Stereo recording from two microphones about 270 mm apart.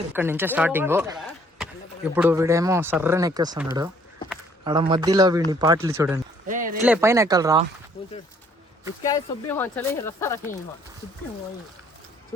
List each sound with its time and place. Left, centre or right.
0.1 s speech: centre
4.6 s speech: centre
6.5 s a sound: right
6.8 s speech: centre
9.0 s speech: centre